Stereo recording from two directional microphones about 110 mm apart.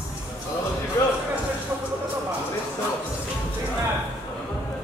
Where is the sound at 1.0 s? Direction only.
30° left (ahead or behind).